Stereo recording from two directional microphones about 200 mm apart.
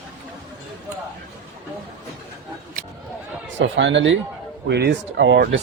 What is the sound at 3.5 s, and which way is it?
Speech, 65° right (ahead or behind).